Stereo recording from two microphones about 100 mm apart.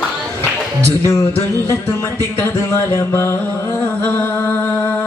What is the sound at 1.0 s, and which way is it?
Music, 25° left (ahead or behind).